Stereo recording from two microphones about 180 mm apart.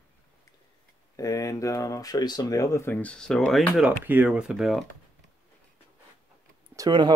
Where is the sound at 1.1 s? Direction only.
20° left (ahead or behind); by 4.8 s centre (ahead or behind).